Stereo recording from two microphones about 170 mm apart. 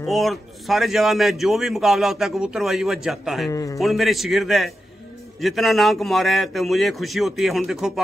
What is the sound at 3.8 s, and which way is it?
A man's voice, centre (ahead or behind).